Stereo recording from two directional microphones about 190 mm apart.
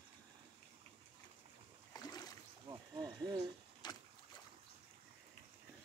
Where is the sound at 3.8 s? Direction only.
20° left (ahead or behind).